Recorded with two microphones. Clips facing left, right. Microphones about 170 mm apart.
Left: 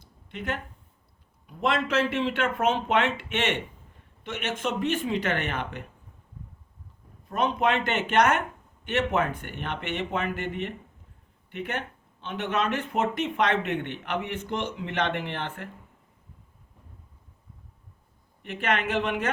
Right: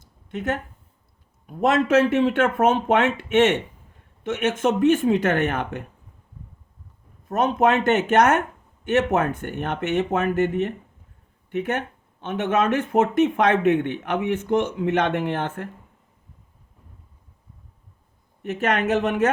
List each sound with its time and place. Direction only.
0.0 s a sound: 45° right (ahead or behind)
1.5 s speech: 45° right (ahead or behind)
7.3 s speech: 45° right (ahead or behind)
18.4 s speech: 45° right (ahead or behind)